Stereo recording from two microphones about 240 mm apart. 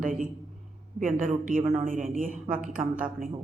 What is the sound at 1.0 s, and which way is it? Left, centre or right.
A woman's voice, right.